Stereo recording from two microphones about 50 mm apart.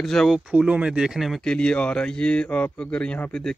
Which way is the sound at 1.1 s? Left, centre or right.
Centre.